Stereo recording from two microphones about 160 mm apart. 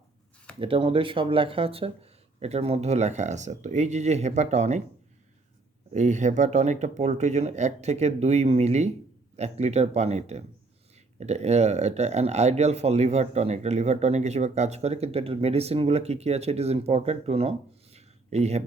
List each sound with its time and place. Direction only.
0.6 s speech: 35° right (ahead or behind)
5.9 s speech: 50° right (ahead or behind)
17.9 s a sound: 45° right (ahead or behind)